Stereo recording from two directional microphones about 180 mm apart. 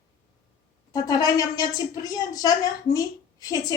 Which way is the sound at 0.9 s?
20° left (ahead or behind).